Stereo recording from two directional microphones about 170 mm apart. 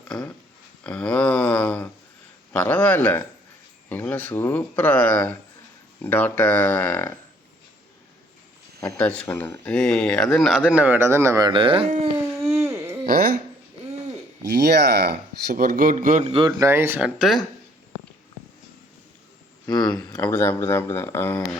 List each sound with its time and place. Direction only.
0.9 s a sound: 5° left (ahead or behind)
2.5 s speech: 10° left (ahead or behind)
9.0 s speech: 10° left (ahead or behind); by 11.9 s 30° right (ahead or behind)
11.9 s a sound: 40° right (ahead or behind)
12.5 s a sound: 15° right (ahead or behind)
14.5 s speech: 75° right (ahead or behind); by 16.4 s 45° right (ahead or behind)
16.5 s speech: 15° right (ahead or behind)
19.6 s speech: 25° left (ahead or behind)
20.2 s speech: 15° left (ahead or behind)